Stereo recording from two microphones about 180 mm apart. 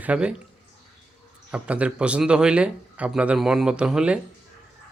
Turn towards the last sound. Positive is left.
turn(degrees=-5)  # may be behind; listen again after turning